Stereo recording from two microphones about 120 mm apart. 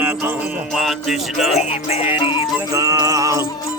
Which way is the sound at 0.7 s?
5° right (ahead or behind).